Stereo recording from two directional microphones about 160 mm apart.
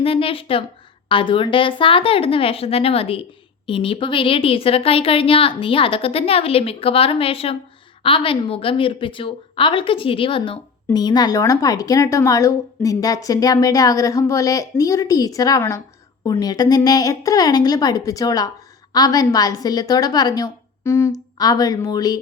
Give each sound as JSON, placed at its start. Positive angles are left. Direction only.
{"t": 0.0, "sound": "a woman's voice", "side_deg": 35}